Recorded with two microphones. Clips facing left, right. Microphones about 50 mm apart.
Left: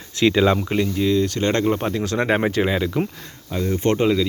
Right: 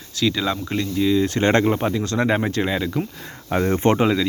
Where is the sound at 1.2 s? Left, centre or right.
Right.